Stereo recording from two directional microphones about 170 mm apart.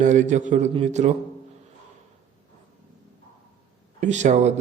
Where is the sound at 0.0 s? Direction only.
45° right (ahead or behind).